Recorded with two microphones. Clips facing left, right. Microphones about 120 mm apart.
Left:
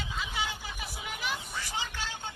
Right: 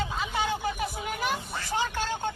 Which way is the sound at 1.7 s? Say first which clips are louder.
Right 11 dB; 50° right (ahead or behind).